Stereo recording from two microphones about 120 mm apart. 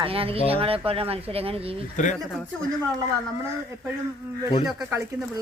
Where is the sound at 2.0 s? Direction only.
90° left.